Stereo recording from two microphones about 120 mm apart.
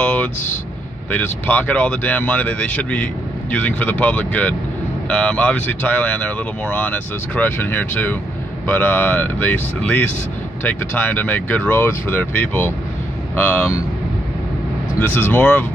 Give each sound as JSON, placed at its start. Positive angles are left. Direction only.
{"t": 0.0, "sound": "vehicle", "side_deg": 10}
{"t": 1.1, "sound": "speech", "side_deg": 15}
{"t": 15.0, "sound": "speech", "side_deg": 20}